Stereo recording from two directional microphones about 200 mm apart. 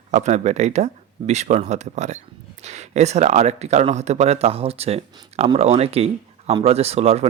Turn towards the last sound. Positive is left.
turn(degrees=-30)  # may be behind; listen again after turning